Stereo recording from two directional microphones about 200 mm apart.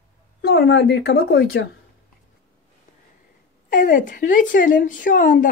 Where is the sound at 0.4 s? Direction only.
60° left (ahead or behind).